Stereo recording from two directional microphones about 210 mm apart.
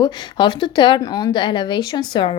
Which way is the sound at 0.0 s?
20° left (ahead or behind).